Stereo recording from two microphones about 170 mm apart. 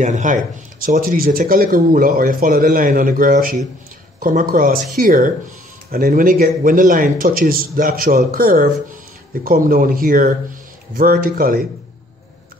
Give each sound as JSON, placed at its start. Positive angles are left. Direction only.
{"t": 0.0, "sound": "speech", "side_deg": -45}